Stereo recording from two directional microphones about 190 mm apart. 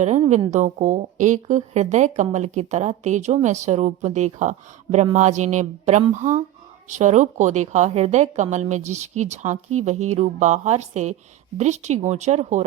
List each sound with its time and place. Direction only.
0.0 s a woman's voice: 35° right (ahead or behind)